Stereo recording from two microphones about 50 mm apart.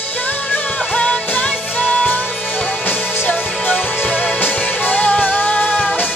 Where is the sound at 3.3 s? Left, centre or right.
Left.